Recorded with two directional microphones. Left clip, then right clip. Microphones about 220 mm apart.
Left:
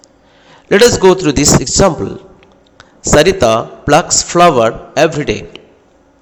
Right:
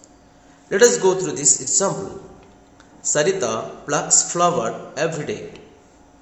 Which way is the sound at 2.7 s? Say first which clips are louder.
Left 12 dB; 40° left (ahead or behind).